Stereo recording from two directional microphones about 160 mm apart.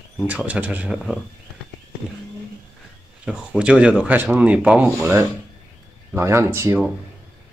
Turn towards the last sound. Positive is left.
turn(degrees=-15)  # may be behind; listen again after turning